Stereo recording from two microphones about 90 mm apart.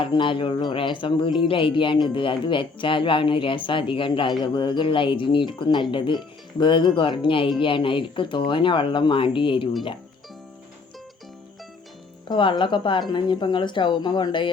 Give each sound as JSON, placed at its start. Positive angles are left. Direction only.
{"t": 0.0, "sound": "speech", "side_deg": 70}
{"t": 12.3, "sound": "a woman's voice", "side_deg": 60}